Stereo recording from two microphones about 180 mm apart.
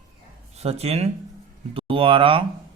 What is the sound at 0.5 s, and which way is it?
Speech, 35° right (ahead or behind).